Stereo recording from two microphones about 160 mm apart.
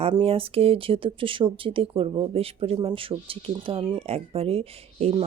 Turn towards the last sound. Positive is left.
turn(degrees=-40)  # may be behind; listen again after turning